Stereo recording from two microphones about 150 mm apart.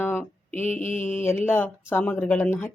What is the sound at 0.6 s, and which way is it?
Mantra, 55° left (ahead or behind).